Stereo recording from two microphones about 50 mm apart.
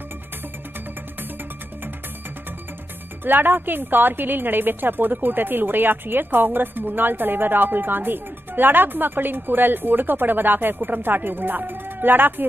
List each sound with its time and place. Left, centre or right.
3.3 s a woman's voice: right